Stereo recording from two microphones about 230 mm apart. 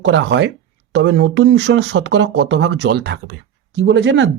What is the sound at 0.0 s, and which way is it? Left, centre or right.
Speech, right.